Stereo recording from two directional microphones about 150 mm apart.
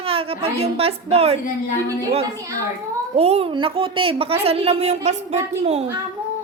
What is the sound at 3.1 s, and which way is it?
Speech, 45° right (ahead or behind).